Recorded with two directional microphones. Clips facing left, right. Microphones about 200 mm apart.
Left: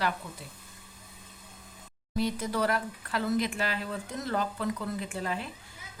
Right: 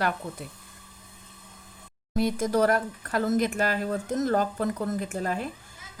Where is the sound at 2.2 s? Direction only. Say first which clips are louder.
Right 6 dB; 50° right (ahead or behind).